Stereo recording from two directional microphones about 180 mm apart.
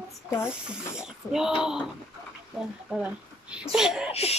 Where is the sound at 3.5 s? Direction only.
5° right (ahead or behind).